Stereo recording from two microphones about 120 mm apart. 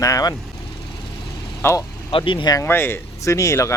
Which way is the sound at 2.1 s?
45° left (ahead or behind).